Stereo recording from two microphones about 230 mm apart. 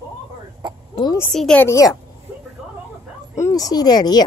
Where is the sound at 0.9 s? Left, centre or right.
Centre.